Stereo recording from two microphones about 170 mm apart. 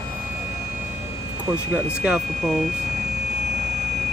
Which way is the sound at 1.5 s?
15° right (ahead or behind).